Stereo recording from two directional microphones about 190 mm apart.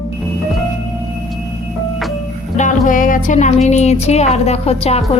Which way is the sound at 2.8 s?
45° left (ahead or behind).